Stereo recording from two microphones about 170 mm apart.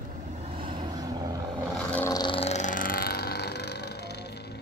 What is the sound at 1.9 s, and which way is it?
Vehicle, 10° left (ahead or behind).